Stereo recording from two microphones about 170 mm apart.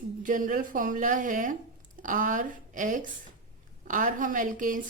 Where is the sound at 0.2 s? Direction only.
50° right (ahead or behind).